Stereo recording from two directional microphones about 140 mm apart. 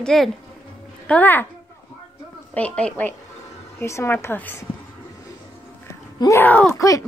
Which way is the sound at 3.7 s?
20° left (ahead or behind).